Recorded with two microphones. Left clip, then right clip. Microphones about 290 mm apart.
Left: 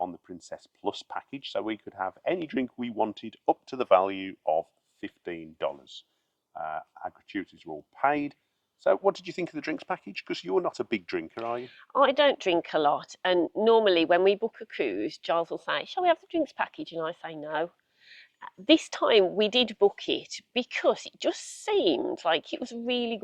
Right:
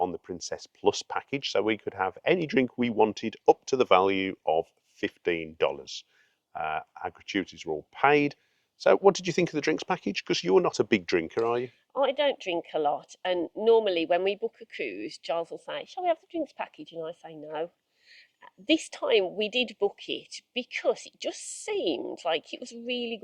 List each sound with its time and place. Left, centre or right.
0.0 s speech: right
11.9 s a woman's voice: left
16.8 s a woman's voice: left